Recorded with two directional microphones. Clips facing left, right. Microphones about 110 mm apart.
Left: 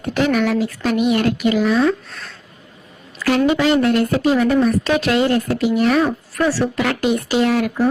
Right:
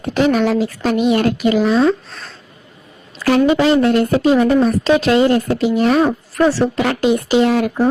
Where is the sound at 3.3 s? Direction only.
30° right (ahead or behind).